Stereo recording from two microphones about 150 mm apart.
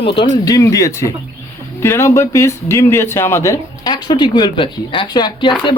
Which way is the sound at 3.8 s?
30° left (ahead or behind).